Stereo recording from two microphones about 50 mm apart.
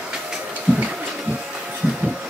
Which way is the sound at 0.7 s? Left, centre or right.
Right.